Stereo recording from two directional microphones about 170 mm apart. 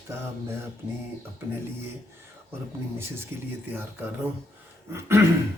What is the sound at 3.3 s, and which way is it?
Speech, 15° right (ahead or behind).